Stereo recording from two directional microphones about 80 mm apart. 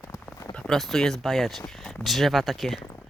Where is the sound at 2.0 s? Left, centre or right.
Centre.